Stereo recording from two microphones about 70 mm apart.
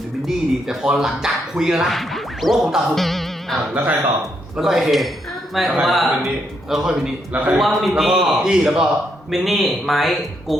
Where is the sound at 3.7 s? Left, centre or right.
Right.